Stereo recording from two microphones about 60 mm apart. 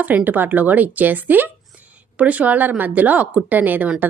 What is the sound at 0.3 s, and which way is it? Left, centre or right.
A woman's voice, right.